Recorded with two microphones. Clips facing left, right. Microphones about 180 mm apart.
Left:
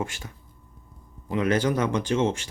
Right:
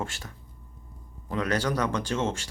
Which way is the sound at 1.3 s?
20° left (ahead or behind).